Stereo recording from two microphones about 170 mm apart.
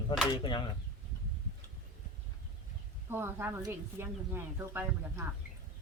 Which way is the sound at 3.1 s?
15° right (ahead or behind).